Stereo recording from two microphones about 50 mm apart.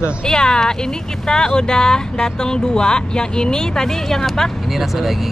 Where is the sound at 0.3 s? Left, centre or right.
Centre.